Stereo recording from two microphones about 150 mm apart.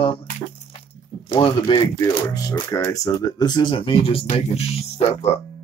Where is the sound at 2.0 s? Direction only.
25° left (ahead or behind); by 5.4 s 45° left (ahead or behind).